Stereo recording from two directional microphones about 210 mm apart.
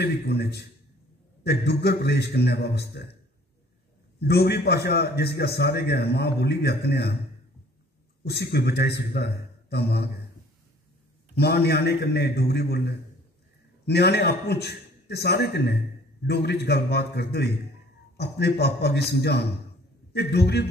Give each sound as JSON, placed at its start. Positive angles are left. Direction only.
{"t": 0.0, "sound": "a man's voice", "side_deg": 50}
{"t": 4.2, "sound": "a man's voice", "side_deg": 50}
{"t": 8.2, "sound": "a man's voice", "side_deg": 50}
{"t": 11.3, "sound": "a man's voice", "side_deg": 50}